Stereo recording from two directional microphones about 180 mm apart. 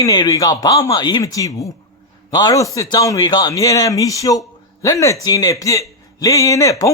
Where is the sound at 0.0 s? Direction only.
20° left (ahead or behind).